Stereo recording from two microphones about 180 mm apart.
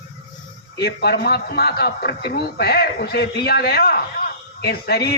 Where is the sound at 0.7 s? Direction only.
60° left (ahead or behind).